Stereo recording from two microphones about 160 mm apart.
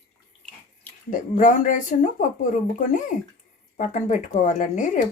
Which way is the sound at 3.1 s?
50° left (ahead or behind).